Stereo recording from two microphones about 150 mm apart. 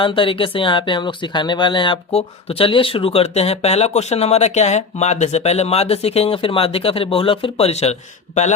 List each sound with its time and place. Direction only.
0.0 s speech: 35° left (ahead or behind)